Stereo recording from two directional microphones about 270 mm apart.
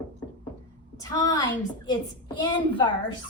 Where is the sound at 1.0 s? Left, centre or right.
Centre.